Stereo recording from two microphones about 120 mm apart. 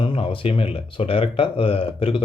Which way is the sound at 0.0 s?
45° left (ahead or behind).